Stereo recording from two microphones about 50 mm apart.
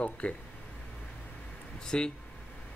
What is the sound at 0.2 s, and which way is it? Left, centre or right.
Speech, left.